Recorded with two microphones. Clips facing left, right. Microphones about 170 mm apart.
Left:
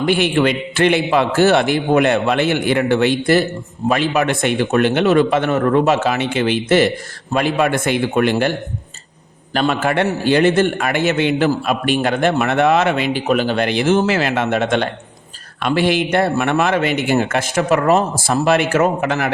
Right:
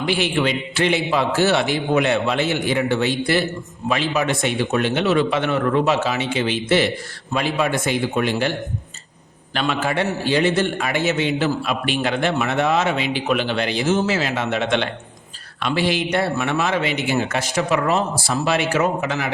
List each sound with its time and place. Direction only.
0.0 s a man's voice: 55° left (ahead or behind)
9.6 s a man's voice: 50° left (ahead or behind)
13.7 s a man's voice: 60° left (ahead or behind)